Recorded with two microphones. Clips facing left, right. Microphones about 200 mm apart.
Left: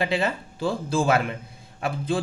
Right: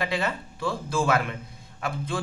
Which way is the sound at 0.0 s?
30° left (ahead or behind).